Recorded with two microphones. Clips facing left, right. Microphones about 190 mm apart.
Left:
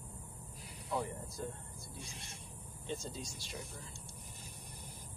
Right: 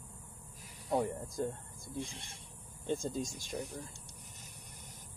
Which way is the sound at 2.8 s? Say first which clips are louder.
Right 7 dB; 50° right (ahead or behind).